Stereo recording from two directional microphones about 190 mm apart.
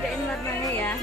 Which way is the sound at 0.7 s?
10° left (ahead or behind).